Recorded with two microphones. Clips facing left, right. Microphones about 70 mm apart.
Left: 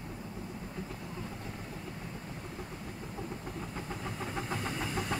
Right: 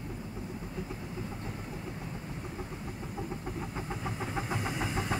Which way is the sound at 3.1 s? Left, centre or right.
Centre.